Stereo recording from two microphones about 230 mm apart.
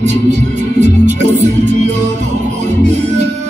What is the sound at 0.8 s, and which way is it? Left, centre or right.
Music, right.